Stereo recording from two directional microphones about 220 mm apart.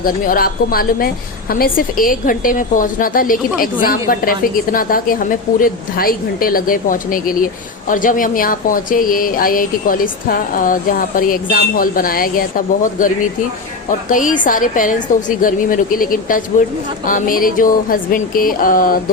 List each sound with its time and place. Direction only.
0.0 s a woman's voice: 40° left (ahead or behind)